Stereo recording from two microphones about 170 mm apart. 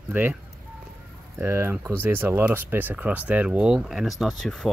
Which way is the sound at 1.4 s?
15° right (ahead or behind).